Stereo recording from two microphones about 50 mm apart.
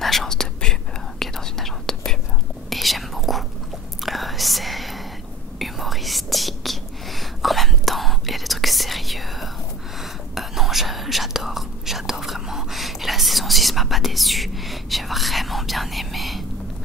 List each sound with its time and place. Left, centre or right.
0.0 s whispering: centre
3.2 s biting: centre
4.0 s whispering: centre